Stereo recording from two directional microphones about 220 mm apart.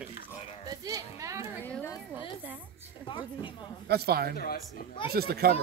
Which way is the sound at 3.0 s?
20° left (ahead or behind).